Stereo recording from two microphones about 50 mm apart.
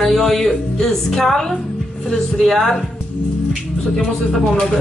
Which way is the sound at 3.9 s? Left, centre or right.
Centre.